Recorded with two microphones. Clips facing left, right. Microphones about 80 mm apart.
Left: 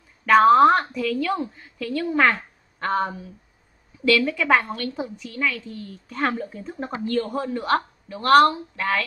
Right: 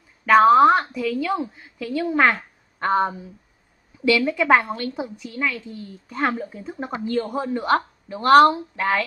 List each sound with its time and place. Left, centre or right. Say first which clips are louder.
0.2 s a woman's voice: right 1 dB; centre
2.9 s speech: right 3 dB; right
4.0 s a woman's voice: right 1 dB; centre